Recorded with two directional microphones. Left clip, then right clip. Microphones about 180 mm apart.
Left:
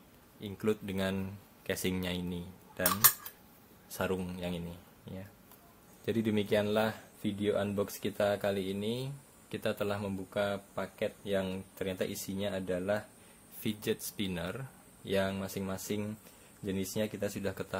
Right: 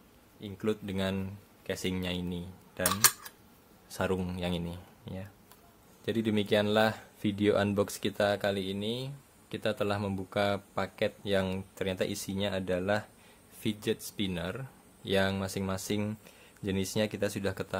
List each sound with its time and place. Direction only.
0.4 s speech: 10° right (ahead or behind)
3.9 s speech: 20° right (ahead or behind)
6.0 s speech: 5° right (ahead or behind)
7.2 s speech: 30° right (ahead or behind)